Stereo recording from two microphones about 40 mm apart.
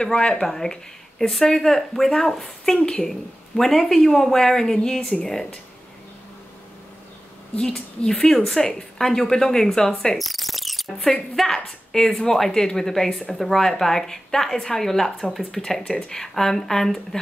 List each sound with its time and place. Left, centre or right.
0.0 s speech: centre
3.1 s speech: centre
7.5 s a woman's voice: centre
10.1 s cricket: centre
11.3 s speech: centre